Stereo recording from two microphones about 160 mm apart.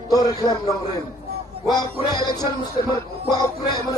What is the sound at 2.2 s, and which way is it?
A man's voice, 25° left (ahead or behind).